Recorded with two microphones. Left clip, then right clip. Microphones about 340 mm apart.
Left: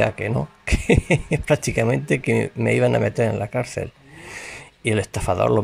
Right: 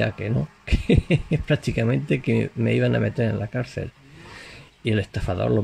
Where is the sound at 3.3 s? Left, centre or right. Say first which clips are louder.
Left 5 dB; left.